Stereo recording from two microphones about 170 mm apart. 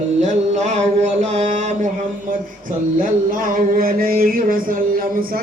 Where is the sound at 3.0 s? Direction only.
55° right (ahead or behind).